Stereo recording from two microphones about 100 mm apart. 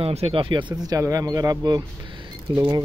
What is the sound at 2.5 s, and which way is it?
Speech, 55° right (ahead or behind).